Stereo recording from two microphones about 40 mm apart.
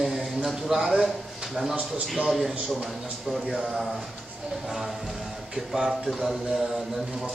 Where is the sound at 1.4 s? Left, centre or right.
Centre.